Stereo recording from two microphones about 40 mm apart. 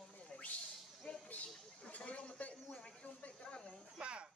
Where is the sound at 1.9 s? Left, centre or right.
Left.